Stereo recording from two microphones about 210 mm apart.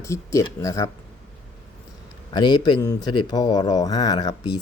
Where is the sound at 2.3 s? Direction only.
20° left (ahead or behind).